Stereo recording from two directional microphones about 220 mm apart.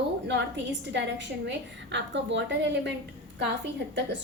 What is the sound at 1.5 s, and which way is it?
A woman's voice, 50° right (ahead or behind).